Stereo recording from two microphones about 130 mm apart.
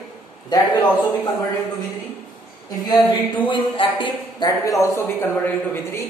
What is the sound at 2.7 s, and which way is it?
A woman's voice, 30° left (ahead or behind).